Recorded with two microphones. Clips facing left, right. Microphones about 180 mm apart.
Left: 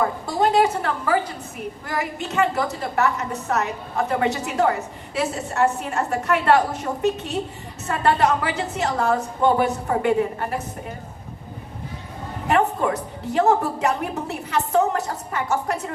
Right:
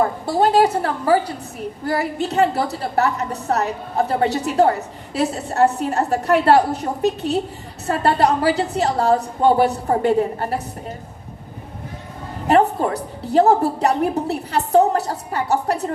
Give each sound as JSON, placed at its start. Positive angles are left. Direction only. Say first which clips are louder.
{"t": 0.3, "sound": "a woman's voice", "louder": "right 3 dB", "side_deg": -35}
{"t": 12.5, "sound": "a woman's voice", "louder": "right 4 dB", "side_deg": -35}